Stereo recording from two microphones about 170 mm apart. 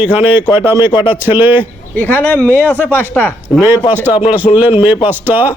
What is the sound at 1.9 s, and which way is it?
Speech, 10° left (ahead or behind).